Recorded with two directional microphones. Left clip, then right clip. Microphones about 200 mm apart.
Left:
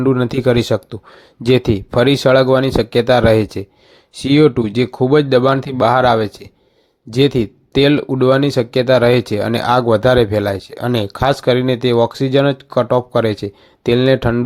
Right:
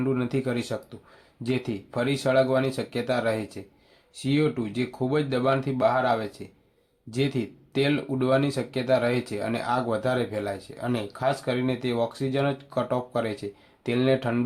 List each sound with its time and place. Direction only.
0.0 s speech: 40° left (ahead or behind)